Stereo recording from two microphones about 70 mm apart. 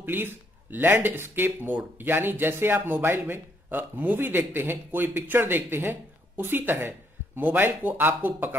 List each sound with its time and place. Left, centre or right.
0.0 s a man's voice: right